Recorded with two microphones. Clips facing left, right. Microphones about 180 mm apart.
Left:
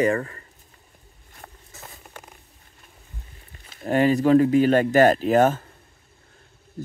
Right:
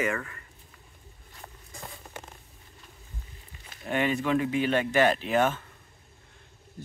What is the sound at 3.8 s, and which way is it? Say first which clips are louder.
Speech: left 8 dB; 40° left (ahead or behind).